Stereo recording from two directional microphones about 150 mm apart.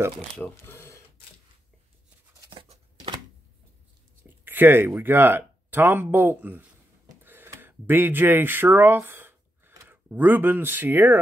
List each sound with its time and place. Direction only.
0.4 s speech: 15° left (ahead or behind)
2.5 s a sound: 35° right (ahead or behind)
4.2 s speech: 15° right (ahead or behind)